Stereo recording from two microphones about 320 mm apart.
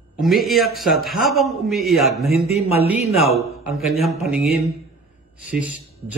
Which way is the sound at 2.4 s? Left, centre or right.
Centre.